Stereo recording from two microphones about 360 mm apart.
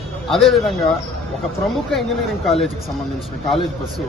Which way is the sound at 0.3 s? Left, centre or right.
Centre.